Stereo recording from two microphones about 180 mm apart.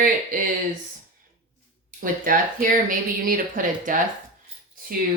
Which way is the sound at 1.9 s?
50° right (ahead or behind).